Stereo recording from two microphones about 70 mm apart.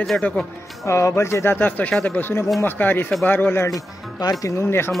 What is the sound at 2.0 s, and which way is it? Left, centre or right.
Speech, left.